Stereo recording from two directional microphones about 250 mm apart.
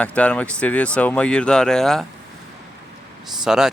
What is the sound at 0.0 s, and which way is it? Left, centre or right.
Speech, centre.